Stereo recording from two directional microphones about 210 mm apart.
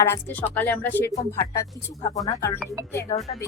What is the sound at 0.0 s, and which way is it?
Speech, 10° left (ahead or behind).